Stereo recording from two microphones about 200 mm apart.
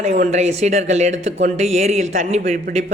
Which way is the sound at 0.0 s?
35° right (ahead or behind).